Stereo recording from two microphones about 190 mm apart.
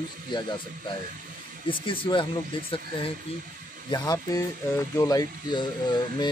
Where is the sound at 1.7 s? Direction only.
25° left (ahead or behind).